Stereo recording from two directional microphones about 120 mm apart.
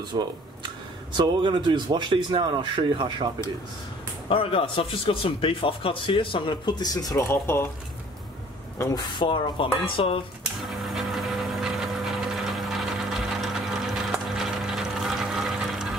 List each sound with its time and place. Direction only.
0.1 s a man's voice: 40° right (ahead or behind)
4.3 s a man's voice: 50° left (ahead or behind); by 7.6 s 20° left (ahead or behind)
8.9 s a man's voice: 40° left (ahead or behind)
10.6 s a sound: centre (ahead or behind)